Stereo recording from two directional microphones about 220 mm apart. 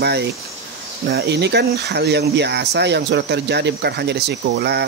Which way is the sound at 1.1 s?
50° right (ahead or behind).